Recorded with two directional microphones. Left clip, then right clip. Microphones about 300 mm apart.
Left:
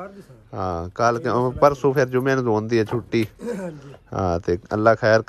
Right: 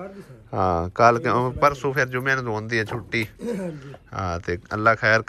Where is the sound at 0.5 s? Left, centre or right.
Centre.